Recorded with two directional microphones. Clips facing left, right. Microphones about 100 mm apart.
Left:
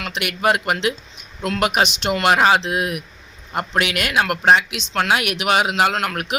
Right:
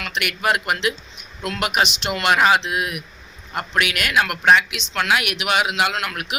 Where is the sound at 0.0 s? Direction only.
30° left (ahead or behind).